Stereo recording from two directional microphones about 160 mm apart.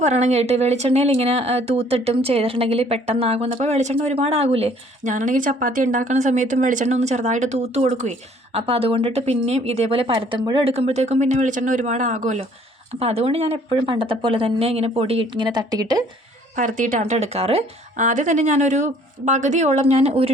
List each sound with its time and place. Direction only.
0.0 s speech: 45° right (ahead or behind); by 16.0 s 25° right (ahead or behind)
16.6 s speech: 55° right (ahead or behind); by 20.3 s 40° right (ahead or behind)